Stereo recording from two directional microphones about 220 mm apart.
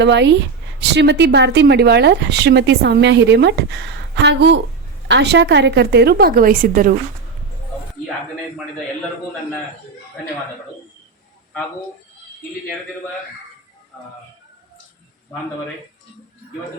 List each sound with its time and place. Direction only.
0.0 s speech: 50° right (ahead or behind)